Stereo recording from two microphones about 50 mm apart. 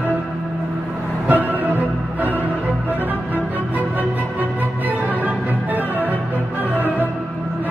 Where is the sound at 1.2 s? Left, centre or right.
Right.